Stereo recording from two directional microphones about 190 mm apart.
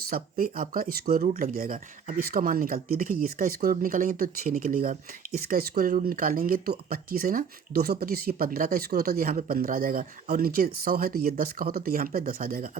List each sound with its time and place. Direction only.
0.1 s speech: 50° right (ahead or behind)